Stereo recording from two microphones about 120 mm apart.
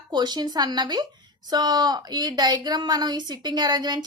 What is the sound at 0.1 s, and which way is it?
A woman's voice, 35° right (ahead or behind).